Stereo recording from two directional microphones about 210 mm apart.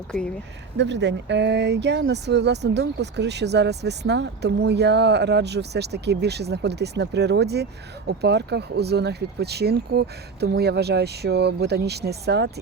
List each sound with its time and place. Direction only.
0.8 s speech: 55° right (ahead or behind)